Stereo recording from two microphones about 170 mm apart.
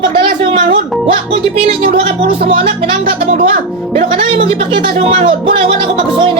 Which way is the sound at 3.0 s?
60° right (ahead or behind).